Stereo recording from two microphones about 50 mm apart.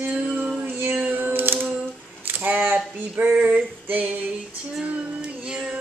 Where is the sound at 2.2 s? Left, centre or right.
Right.